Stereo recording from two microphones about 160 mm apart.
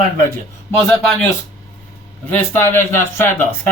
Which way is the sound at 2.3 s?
15° left (ahead or behind).